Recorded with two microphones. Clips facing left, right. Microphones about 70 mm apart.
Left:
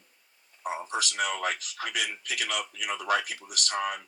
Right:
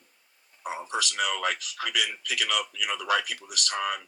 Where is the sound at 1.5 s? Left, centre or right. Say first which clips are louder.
Right 2 dB; left.